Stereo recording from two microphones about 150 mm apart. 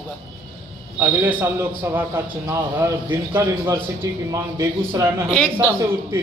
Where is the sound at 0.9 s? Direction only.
15° right (ahead or behind).